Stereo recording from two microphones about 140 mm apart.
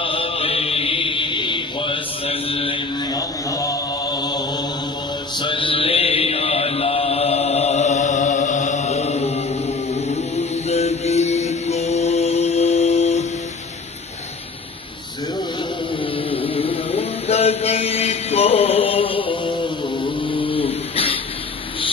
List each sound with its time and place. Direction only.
0.0 s chant: 40° left (ahead or behind)
3.2 s mantra: 25° left (ahead or behind)
5.4 s mantra: 40° left (ahead or behind)
10.0 s music: 50° left (ahead or behind)
16.3 s mantra: 40° left (ahead or behind)